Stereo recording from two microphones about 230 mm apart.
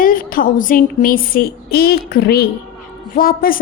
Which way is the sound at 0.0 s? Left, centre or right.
Left.